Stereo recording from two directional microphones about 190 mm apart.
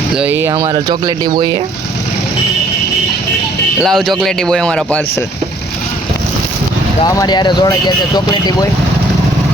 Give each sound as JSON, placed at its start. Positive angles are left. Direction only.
{"t": 0.2, "sound": "speech", "side_deg": -10}
{"t": 3.8, "sound": "a man's voice", "side_deg": 0}
{"t": 7.0, "sound": "speech", "side_deg": 20}